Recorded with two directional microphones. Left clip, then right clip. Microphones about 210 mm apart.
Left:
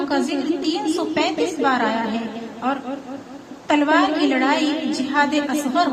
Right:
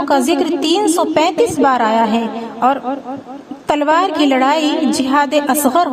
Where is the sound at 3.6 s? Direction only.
50° right (ahead or behind).